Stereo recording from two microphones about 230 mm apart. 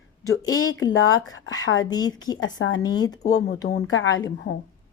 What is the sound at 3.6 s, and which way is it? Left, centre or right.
Speech, left.